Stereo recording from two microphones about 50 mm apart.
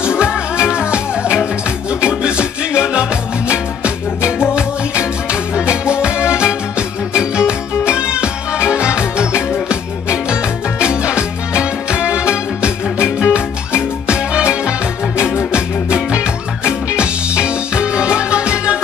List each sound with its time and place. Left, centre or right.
0.6 s music: left
2.0 s music: right